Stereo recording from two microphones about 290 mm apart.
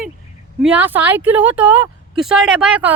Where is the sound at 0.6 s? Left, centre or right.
Centre.